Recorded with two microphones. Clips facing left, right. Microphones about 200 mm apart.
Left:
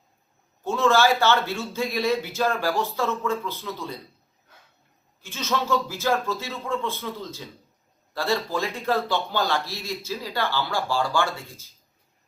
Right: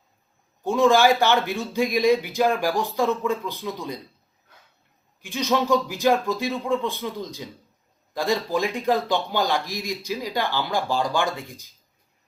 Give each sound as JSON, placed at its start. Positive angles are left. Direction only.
{"t": 0.6, "sound": "a man's voice", "side_deg": -15}
{"t": 5.2, "sound": "a man's voice", "side_deg": -15}